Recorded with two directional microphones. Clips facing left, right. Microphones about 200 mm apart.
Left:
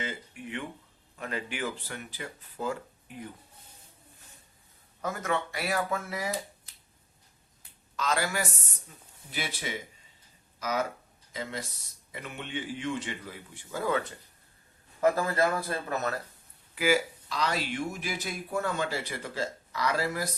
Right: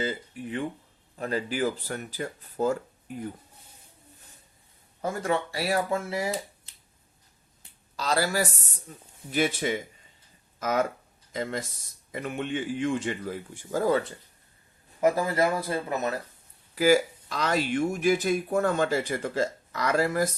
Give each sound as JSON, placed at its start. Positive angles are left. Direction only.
{"t": 0.0, "sound": "speech", "side_deg": -35}
{"t": 5.0, "sound": "speech", "side_deg": -30}
{"t": 7.9, "sound": "speech", "side_deg": -35}
{"t": 9.3, "sound": "speech", "side_deg": -50}
{"t": 15.0, "sound": "speech", "side_deg": -15}
{"t": 16.7, "sound": "speech", "side_deg": -40}